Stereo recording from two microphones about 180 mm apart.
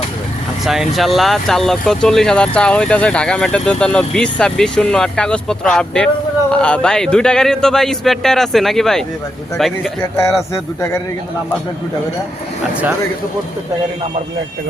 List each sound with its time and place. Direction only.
0.6 s speech: centre (ahead or behind)
10.0 s speech: 15° left (ahead or behind)
12.7 s speech: 10° right (ahead or behind)